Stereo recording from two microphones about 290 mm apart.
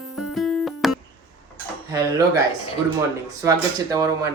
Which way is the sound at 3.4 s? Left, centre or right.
Centre.